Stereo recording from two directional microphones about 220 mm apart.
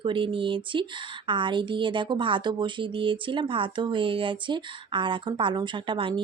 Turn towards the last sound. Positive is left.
turn(degrees=-20)  # may be behind; listen again after turning